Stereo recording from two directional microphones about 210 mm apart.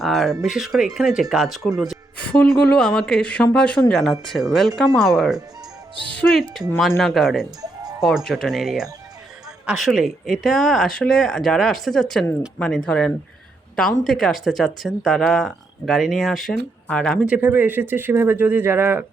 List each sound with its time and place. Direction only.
0.0 s speech: centre (ahead or behind)
7.6 s music: 20° right (ahead or behind)
8.0 s speech: centre (ahead or behind)